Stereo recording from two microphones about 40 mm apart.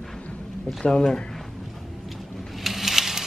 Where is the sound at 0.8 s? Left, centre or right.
Centre.